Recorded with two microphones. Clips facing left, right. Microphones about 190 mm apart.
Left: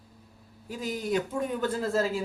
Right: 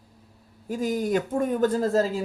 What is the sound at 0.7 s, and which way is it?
Speech, 45° right (ahead or behind).